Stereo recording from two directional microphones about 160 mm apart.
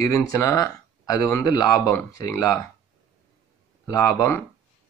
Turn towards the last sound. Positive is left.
turn(degrees=20)  # may be behind; listen again after turning